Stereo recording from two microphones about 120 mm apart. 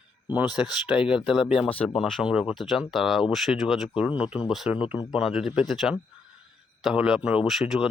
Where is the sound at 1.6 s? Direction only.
10° left (ahead or behind); by 4.8 s 5° right (ahead or behind).